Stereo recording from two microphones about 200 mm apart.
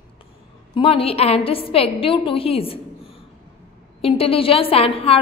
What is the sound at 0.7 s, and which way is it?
A woman's voice, 30° left (ahead or behind).